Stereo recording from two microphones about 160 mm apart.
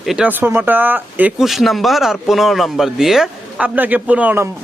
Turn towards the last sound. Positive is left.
turn(degrees=-10)  # may be behind; listen again after turning